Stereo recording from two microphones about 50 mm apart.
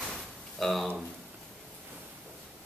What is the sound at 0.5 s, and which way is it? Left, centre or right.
Speech, centre.